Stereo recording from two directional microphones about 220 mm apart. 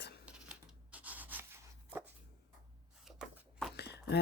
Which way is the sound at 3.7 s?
50° left (ahead or behind).